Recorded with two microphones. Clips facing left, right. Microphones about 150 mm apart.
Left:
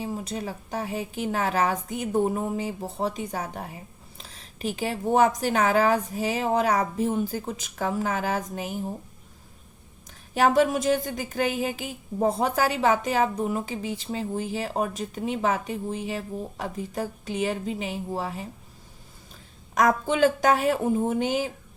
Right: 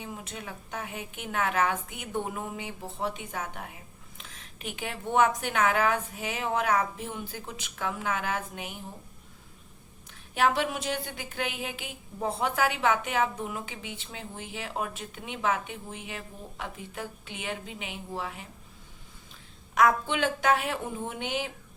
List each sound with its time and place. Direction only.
0.0 s speech: 35° left (ahead or behind)
10.3 s speech: 40° left (ahead or behind)
19.7 s speech: 40° left (ahead or behind)